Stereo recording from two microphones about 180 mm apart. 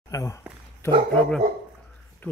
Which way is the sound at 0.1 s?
20° left (ahead or behind).